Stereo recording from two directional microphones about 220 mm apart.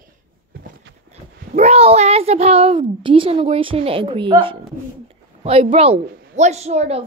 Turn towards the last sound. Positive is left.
turn(degrees=-30)  # may be behind; listen again after turning